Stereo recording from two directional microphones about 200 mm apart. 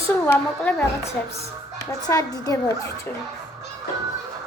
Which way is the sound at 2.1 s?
15° left (ahead or behind).